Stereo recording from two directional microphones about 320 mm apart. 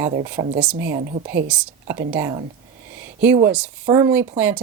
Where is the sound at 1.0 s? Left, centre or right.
Right.